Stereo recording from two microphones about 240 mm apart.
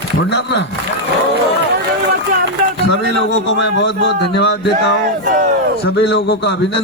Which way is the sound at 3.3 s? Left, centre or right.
Left.